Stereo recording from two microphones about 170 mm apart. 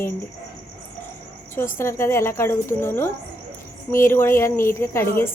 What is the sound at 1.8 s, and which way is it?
Speech, 15° left (ahead or behind).